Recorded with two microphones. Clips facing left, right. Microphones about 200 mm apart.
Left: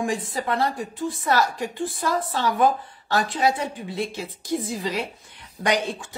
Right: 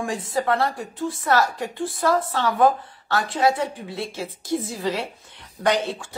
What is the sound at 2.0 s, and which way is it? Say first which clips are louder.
Speech: right 3 dB; 15° left (ahead or behind).